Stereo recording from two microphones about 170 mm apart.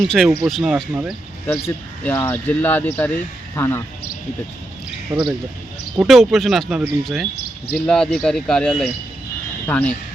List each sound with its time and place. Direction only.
0.0 s speech: centre (ahead or behind)
1.5 s speech: 10° left (ahead or behind)
5.1 s speech: 30° right (ahead or behind)
6.0 s speech: centre (ahead or behind)